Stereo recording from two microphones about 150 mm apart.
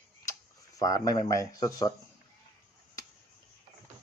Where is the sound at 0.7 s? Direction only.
25° left (ahead or behind).